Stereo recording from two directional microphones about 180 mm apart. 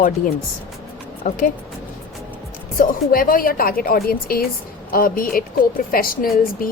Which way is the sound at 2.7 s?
50° left (ahead or behind).